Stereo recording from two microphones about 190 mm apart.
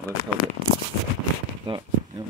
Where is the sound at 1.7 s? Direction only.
25° right (ahead or behind).